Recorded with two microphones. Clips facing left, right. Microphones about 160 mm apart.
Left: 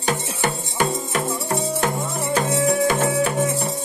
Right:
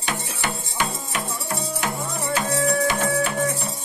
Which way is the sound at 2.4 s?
20° left (ahead or behind).